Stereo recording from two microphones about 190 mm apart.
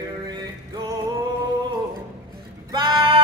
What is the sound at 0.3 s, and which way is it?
Music, 20° right (ahead or behind).